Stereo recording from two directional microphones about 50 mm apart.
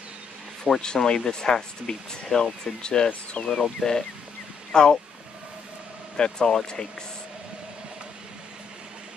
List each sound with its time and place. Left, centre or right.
0.7 s speech: centre
4.7 s speech: centre
6.1 s speech: centre